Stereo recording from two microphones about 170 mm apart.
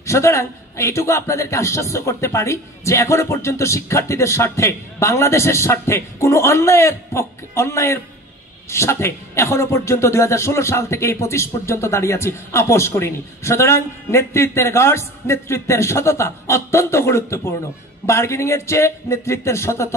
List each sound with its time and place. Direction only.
0.0 s a man's voice: 15° left (ahead or behind)